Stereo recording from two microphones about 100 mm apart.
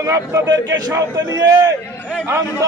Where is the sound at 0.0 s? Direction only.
35° right (ahead or behind).